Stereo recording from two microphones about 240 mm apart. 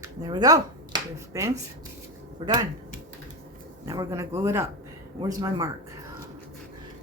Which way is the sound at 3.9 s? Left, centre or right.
Centre.